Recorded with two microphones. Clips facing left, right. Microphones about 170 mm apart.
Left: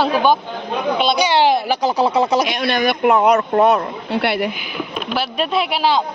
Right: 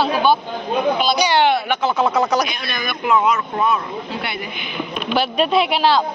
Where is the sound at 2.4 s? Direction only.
70° left (ahead or behind).